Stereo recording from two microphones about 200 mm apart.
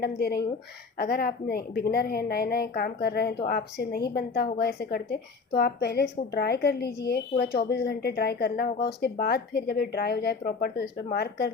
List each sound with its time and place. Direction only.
0.2 s a woman's voice: 55° left (ahead or behind)